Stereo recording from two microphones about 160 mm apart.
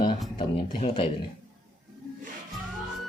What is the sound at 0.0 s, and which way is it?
Speech, 30° left (ahead or behind).